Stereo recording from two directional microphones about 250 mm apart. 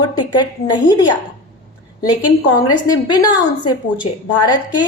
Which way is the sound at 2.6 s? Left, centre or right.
Centre.